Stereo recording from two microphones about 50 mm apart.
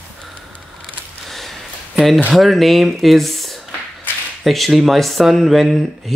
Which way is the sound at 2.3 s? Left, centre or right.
Centre.